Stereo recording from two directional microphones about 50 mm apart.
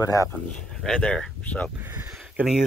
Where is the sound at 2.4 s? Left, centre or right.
Right.